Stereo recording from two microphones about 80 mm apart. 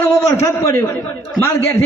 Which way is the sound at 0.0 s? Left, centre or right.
Left.